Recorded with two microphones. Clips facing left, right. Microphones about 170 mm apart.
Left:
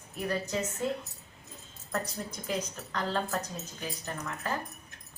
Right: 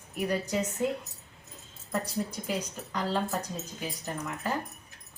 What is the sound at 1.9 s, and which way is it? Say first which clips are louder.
Speech: right 3 dB; 10° right (ahead or behind).